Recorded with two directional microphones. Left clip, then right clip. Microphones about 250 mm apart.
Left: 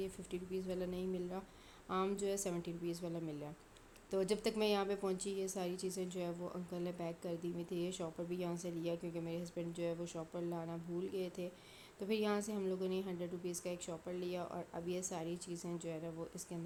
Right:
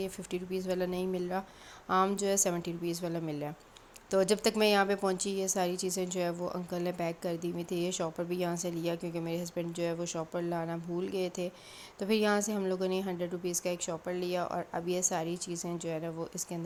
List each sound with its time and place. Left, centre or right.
0.0 s a woman's voice: right